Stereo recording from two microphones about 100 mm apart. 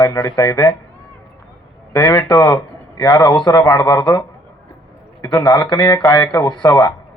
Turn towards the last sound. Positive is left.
turn(degrees=40)  # may be behind; listen again after turning